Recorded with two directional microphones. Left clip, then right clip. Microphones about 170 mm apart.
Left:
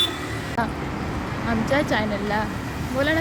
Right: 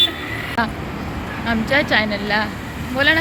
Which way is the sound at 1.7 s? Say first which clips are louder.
Right 6 dB; 10° left (ahead or behind).